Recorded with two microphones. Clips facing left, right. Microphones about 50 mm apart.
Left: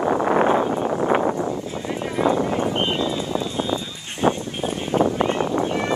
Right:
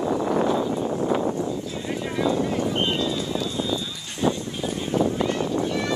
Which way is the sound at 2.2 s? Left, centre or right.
Left.